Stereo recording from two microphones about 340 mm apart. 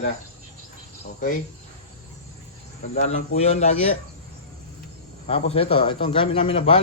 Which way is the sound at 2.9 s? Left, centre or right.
Centre.